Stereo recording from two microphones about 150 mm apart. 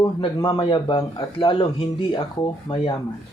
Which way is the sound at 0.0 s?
30° left (ahead or behind).